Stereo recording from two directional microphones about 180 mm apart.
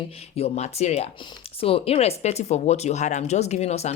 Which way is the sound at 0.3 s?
35° left (ahead or behind).